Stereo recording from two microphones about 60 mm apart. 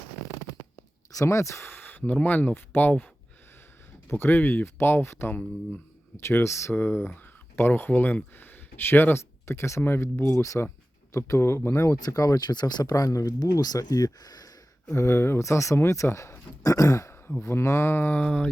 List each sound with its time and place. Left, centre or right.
1.1 s speech: left
1.7 s a sound: left
2.2 s speech: left
4.1 s speech: left
6.7 s speech: left
9.8 s speech: left
11.1 s speech: left
12.0 s throat clearing: left
12.8 s speech: left
14.9 s speech: left
15.4 s speech: left
16.6 s throat clearing: left
17.4 s speech: left
18.2 s a sound: centre